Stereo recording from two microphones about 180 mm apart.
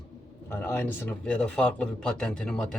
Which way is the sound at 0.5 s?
10° left (ahead or behind).